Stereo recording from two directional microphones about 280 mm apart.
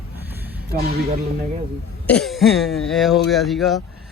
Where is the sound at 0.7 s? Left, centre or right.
Right.